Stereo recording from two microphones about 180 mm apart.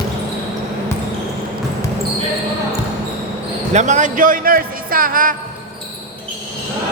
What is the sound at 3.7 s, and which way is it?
Speech, 40° right (ahead or behind).